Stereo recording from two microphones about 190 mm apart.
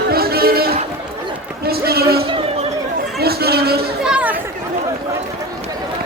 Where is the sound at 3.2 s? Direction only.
55° right (ahead or behind).